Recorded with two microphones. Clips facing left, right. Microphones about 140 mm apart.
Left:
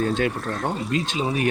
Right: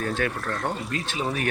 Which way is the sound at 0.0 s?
25° left (ahead or behind).